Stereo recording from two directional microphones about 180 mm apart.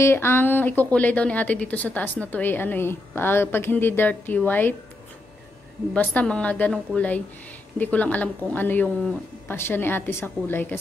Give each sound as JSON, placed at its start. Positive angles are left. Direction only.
{"t": 0.0, "sound": "a woman's voice", "side_deg": 10}
{"t": 5.9, "sound": "a woman's voice", "side_deg": 5}